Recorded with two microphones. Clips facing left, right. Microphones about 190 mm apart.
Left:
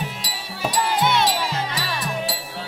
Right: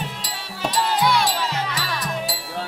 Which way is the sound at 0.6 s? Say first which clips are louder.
Even; 10° left (ahead or behind).